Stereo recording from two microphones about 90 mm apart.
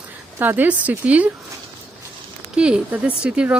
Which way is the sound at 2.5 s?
10° right (ahead or behind).